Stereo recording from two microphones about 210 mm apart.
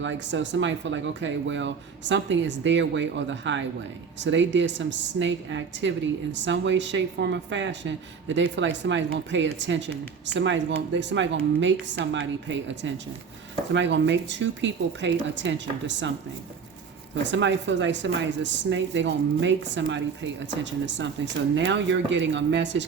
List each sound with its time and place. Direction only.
0.0 s speech: 60° right (ahead or behind)
17.3 s speech: 60° right (ahead or behind)